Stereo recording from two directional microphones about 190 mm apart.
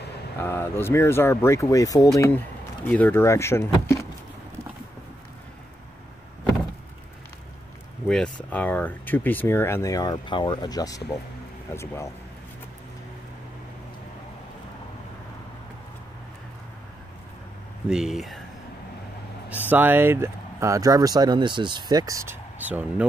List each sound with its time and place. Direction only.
0.4 s speech: 10° left (ahead or behind)
8.5 s speech: 10° left (ahead or behind)
17.8 s speech: centre (ahead or behind)
19.7 s speech: 10° right (ahead or behind)